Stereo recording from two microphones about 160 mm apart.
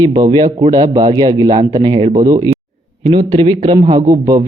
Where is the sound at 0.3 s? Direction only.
30° right (ahead or behind).